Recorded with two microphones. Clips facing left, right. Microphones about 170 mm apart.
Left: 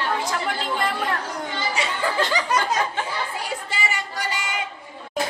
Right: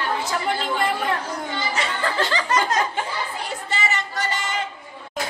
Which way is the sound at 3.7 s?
10° left (ahead or behind).